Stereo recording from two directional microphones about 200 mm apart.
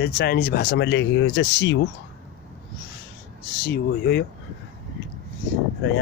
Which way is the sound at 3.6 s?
50° left (ahead or behind).